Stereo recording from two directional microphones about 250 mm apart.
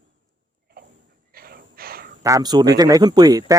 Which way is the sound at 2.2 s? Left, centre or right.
Centre.